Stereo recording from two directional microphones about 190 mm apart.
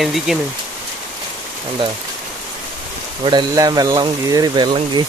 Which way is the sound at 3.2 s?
20° right (ahead or behind).